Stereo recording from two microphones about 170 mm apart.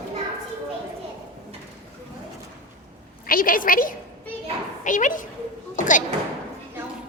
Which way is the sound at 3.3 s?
55° left (ahead or behind).